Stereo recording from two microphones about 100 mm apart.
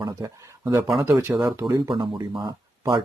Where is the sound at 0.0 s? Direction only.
35° right (ahead or behind).